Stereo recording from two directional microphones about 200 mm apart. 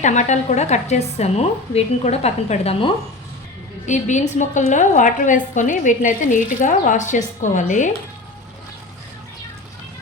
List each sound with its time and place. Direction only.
0.0 s a woman's voice: 35° left (ahead or behind)